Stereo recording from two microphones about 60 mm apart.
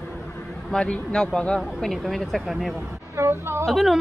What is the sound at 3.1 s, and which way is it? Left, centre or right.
Speech, right.